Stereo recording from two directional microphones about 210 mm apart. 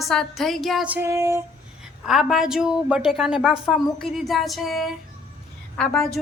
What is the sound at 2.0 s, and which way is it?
A woman's voice, centre (ahead or behind).